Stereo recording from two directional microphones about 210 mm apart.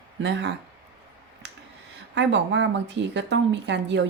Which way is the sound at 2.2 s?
60° right (ahead or behind).